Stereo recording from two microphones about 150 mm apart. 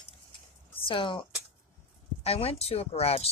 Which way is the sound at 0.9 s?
35° left (ahead or behind).